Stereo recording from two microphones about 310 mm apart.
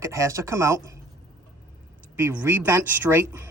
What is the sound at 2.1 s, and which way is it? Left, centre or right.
Speech, centre.